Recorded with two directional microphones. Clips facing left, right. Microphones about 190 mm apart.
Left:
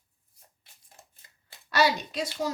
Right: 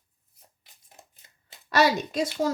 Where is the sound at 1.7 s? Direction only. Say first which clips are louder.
Right 3 dB; 45° right (ahead or behind).